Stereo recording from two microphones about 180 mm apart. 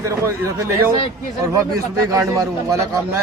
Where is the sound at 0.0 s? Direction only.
15° right (ahead or behind).